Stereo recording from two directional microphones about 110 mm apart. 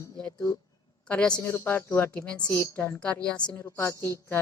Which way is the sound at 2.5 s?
25° left (ahead or behind).